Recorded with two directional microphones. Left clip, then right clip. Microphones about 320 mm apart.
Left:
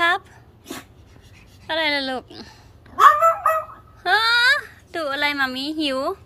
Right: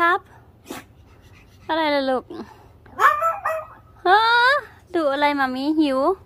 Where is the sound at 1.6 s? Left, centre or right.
Centre.